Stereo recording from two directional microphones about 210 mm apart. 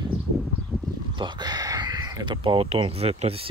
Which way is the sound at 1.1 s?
20° right (ahead or behind).